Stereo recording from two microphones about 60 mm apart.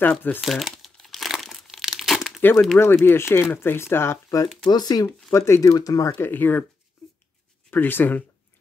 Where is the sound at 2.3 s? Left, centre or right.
Left.